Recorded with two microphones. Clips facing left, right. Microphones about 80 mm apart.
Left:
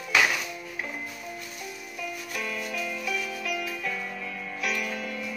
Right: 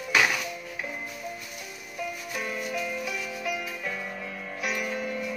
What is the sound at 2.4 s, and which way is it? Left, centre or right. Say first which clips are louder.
Music: right 1 dB; centre.